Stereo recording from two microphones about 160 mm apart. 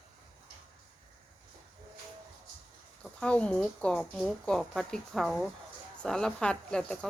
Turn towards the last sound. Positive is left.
turn(degrees=5)  # may be behind; listen again after turning